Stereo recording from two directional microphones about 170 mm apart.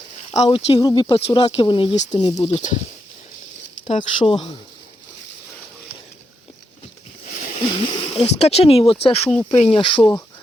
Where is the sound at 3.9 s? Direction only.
35° left (ahead or behind).